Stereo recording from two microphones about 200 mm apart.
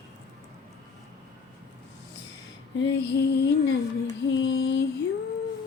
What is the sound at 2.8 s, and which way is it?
Female singing, 60° left (ahead or behind).